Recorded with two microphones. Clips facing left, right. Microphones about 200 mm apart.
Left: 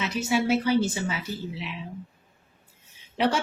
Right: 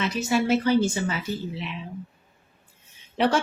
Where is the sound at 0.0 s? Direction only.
5° left (ahead or behind).